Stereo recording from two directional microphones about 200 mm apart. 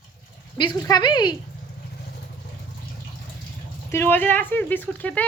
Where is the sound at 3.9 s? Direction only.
10° left (ahead or behind).